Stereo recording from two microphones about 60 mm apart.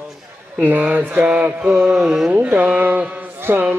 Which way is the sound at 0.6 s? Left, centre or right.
Right.